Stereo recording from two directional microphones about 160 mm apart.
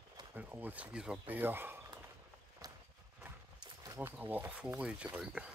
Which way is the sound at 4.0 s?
10° right (ahead or behind).